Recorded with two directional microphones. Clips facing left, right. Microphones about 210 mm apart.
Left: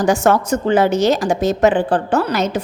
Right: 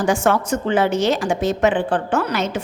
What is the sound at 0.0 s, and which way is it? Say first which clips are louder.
A woman's voice: left 3 dB; 40° left (ahead or behind).